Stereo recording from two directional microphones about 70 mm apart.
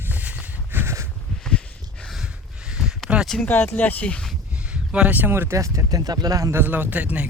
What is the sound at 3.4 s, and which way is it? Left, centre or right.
Speech, left.